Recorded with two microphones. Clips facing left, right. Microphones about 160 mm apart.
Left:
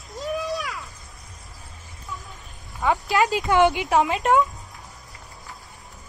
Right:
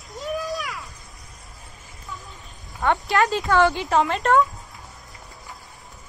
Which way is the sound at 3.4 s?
15° left (ahead or behind).